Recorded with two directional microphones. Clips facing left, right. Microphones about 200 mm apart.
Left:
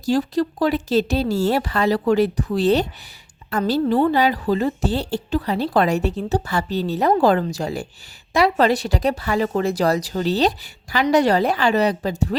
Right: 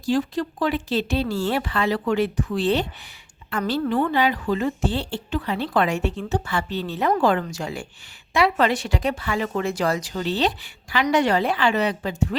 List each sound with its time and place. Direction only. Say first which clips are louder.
0.0 s speech: left 3 dB; 40° left (ahead or behind)